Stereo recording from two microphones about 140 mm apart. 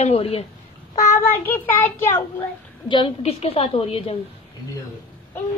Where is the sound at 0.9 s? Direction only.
15° left (ahead or behind).